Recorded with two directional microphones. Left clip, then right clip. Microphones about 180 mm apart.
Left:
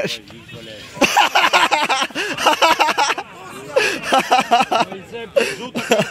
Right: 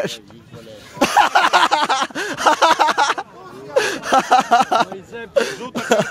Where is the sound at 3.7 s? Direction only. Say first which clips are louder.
Even; 10° right (ahead or behind).